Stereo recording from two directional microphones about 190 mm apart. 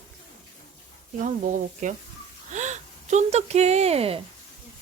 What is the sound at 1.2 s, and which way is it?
Speech, 40° right (ahead or behind).